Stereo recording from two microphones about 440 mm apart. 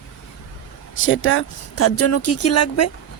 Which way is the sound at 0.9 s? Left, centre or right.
Left.